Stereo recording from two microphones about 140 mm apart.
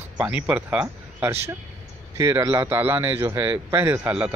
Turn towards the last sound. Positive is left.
turn(degrees=-10)  # may be behind; listen again after turning